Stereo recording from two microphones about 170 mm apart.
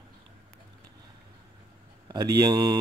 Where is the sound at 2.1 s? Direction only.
20° right (ahead or behind).